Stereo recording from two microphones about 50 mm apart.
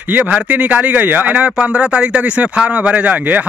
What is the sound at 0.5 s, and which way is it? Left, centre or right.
Speech, right.